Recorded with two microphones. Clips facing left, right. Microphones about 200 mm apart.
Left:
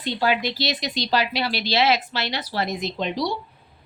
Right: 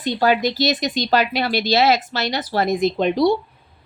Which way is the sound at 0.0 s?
45° right (ahead or behind).